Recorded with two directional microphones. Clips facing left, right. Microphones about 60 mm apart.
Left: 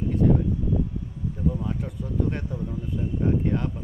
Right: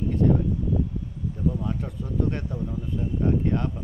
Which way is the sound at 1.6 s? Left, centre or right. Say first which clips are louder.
Even; centre.